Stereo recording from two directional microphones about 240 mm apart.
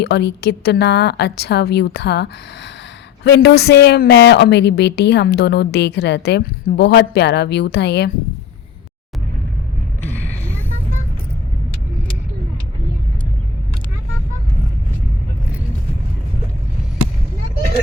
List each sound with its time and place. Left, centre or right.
0.0 s a woman's voice: left